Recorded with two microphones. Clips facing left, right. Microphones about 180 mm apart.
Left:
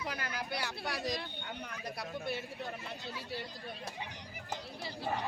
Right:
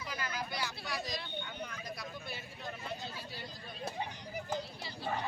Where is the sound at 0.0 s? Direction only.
65° left (ahead or behind).